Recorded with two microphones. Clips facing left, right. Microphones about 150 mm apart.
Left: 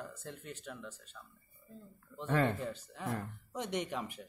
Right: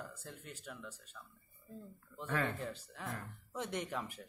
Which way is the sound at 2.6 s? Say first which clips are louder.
Left 3 dB; 5° left (ahead or behind).